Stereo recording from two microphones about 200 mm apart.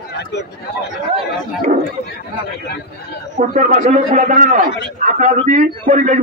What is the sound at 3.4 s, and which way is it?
A man's voice, 40° right (ahead or behind).